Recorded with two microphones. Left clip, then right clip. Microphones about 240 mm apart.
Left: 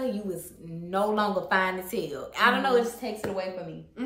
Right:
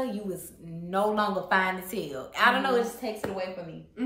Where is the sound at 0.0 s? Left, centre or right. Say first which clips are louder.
Left 1 dB; centre.